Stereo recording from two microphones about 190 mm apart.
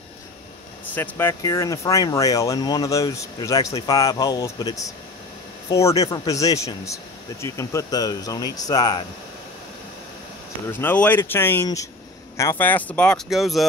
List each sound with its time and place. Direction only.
0.9 s speech: 10° left (ahead or behind)
10.7 s speech: 10° left (ahead or behind)